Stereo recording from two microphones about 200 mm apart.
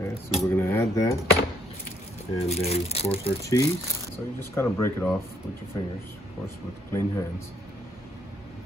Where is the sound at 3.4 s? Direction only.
15° left (ahead or behind).